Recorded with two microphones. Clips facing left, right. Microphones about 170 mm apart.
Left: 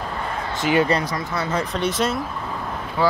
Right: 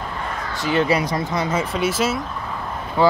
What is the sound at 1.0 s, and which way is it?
Speech, 20° right (ahead or behind).